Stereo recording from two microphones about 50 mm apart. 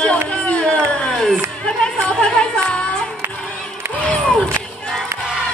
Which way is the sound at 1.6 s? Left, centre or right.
Left.